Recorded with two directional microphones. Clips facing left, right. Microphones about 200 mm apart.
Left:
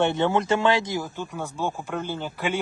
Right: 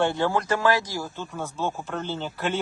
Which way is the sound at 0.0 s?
20° left (ahead or behind).